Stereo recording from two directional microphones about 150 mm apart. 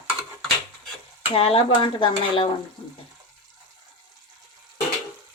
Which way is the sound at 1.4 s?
40° left (ahead or behind).